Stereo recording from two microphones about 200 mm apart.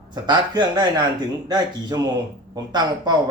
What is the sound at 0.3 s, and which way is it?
Speech, 20° right (ahead or behind).